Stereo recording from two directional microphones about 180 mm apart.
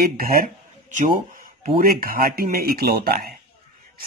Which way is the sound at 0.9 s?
45° right (ahead or behind).